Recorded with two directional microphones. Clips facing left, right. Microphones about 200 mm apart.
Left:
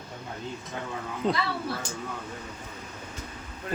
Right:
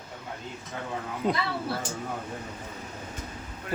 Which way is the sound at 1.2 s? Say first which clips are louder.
Even; 5° right (ahead or behind).